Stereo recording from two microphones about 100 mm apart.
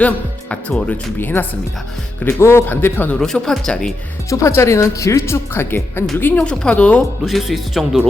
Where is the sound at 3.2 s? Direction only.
5° left (ahead or behind).